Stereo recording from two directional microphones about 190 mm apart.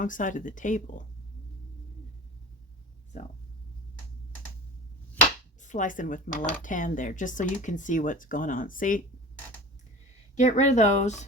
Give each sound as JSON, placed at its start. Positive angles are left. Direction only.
{"t": 0.0, "sound": "speech", "side_deg": 45}
{"t": 5.6, "sound": "speech", "side_deg": 40}
{"t": 10.3, "sound": "speech", "side_deg": 40}